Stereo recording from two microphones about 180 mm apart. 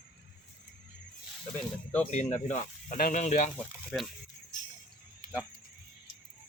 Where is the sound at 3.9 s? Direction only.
10° left (ahead or behind).